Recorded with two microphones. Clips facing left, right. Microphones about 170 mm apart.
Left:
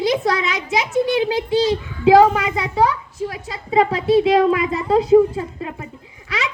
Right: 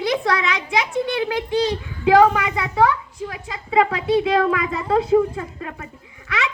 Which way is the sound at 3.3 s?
35° left (ahead or behind).